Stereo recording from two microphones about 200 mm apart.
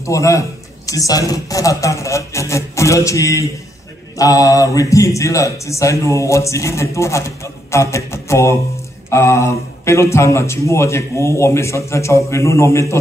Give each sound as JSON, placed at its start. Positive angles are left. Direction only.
{"t": 0.0, "sound": "speech", "side_deg": 15}